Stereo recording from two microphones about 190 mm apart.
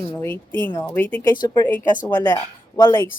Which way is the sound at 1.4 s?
25° left (ahead or behind).